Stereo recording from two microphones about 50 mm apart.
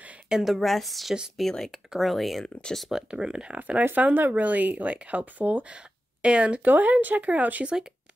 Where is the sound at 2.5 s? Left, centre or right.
Left.